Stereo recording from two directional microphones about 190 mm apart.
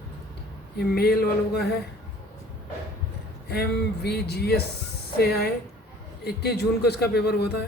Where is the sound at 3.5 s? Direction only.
60° left (ahead or behind).